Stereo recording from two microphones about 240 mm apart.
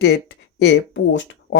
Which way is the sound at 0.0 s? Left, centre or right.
Left.